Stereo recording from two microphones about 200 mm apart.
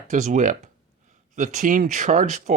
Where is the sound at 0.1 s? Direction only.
40° right (ahead or behind).